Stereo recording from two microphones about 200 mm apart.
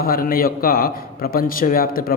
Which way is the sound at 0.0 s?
45° left (ahead or behind).